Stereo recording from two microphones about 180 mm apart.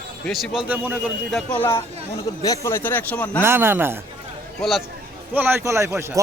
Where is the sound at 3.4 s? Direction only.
15° right (ahead or behind).